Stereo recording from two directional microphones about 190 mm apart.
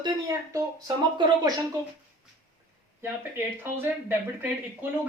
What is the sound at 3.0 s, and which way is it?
Speech, 10° right (ahead or behind).